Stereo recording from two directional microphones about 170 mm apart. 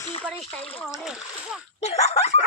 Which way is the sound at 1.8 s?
40° left (ahead or behind).